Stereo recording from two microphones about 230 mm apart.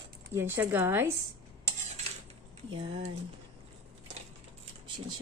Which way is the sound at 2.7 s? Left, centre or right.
Right.